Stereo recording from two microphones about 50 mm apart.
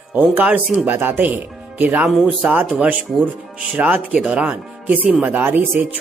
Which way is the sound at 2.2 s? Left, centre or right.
Right.